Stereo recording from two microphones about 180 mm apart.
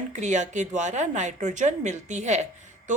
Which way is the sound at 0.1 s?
40° right (ahead or behind).